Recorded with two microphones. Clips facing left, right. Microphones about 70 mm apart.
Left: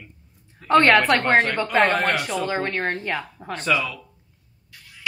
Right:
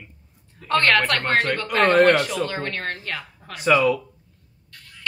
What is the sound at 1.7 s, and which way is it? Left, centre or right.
Speech, centre.